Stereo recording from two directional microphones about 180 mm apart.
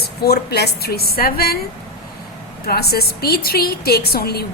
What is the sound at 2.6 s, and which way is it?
A woman's voice, 60° left (ahead or behind).